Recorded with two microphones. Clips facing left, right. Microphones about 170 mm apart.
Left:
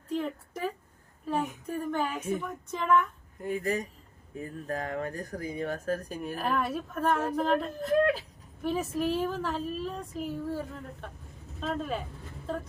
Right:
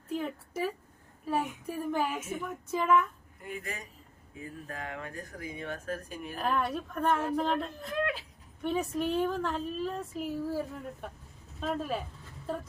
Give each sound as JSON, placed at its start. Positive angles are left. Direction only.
{"t": 0.1, "sound": "a sound", "side_deg": -5}
{"t": 2.4, "sound": "speech", "side_deg": -5}
{"t": 3.4, "sound": "speech", "side_deg": 40}
{"t": 6.3, "sound": "speech", "side_deg": 5}
{"t": 7.9, "sound": "speech", "side_deg": 40}
{"t": 8.6, "sound": "speech", "side_deg": 0}
{"t": 11.6, "sound": "speech", "side_deg": -5}